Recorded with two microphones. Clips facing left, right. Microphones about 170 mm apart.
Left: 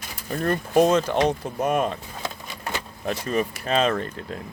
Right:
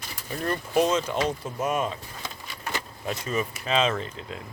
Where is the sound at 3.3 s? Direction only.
50° left (ahead or behind).